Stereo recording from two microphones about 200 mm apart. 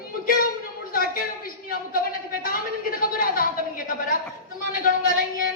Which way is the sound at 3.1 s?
45° left (ahead or behind).